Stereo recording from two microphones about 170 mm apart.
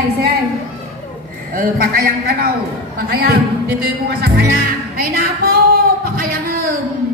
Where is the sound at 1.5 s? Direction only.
55° right (ahead or behind).